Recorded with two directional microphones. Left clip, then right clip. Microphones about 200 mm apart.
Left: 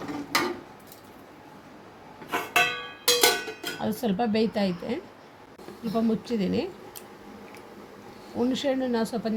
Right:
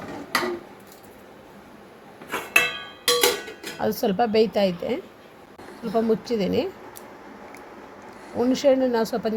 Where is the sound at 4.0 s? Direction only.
15° right (ahead or behind).